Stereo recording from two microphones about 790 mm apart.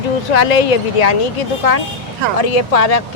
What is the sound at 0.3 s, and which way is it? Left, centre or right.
Speech, left.